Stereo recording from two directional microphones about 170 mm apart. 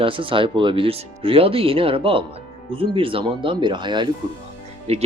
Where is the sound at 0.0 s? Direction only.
30° right (ahead or behind).